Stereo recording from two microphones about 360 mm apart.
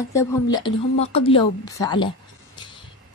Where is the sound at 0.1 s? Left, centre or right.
Centre.